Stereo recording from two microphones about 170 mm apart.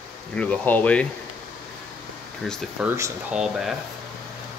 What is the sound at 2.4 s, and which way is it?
Speech, 5° left (ahead or behind).